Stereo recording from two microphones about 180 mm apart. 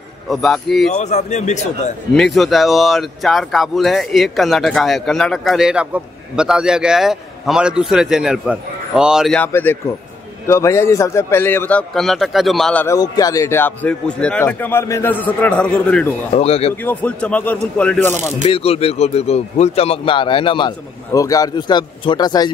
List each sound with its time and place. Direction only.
0.3 s speech: centre (ahead or behind)
0.9 s speech: 40° left (ahead or behind)
2.1 s speech: centre (ahead or behind)
9.4 s a man's voice: 10° left (ahead or behind)
12.8 s a man's voice: 20° left (ahead or behind)
16.3 s speech: 35° left (ahead or behind)
16.8 s a man's voice: 10° left (ahead or behind)
18.4 s speech: 30° left (ahead or behind)